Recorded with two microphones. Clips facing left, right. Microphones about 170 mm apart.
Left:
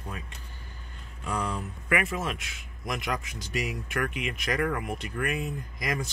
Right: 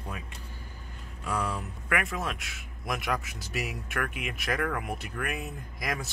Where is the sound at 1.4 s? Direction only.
Centre (ahead or behind).